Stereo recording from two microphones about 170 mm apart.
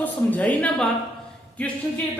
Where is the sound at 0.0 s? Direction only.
10° left (ahead or behind).